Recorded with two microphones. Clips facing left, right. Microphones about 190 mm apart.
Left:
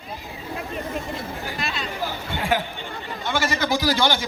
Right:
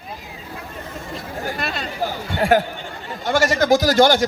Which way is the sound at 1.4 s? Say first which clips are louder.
Right 3 dB; 50° right (ahead or behind).